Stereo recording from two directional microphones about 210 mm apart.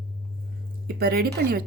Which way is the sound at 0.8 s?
50° right (ahead or behind).